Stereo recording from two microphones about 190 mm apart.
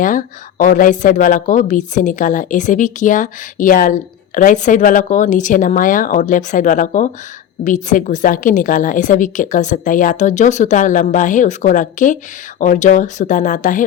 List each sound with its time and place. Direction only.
0.0 s a woman's voice: 45° left (ahead or behind)